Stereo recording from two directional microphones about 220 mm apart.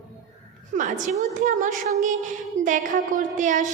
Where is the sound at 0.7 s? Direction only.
35° right (ahead or behind).